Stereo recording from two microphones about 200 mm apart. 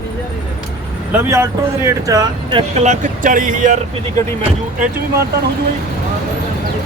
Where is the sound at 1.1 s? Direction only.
15° right (ahead or behind); by 3.7 s 40° right (ahead or behind).